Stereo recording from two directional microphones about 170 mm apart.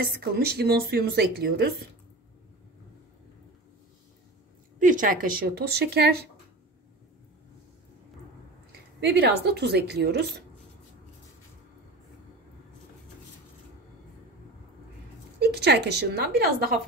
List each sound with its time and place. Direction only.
0.0 s a woman's voice: 65° right (ahead or behind)
4.7 s speech: 50° right (ahead or behind); by 6.2 s 70° right (ahead or behind)
9.0 s a woman's voice: 75° right (ahead or behind)
15.3 s a woman's voice: 75° right (ahead or behind)